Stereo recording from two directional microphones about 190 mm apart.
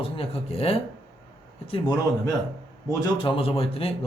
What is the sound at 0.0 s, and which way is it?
Speech, 30° left (ahead or behind).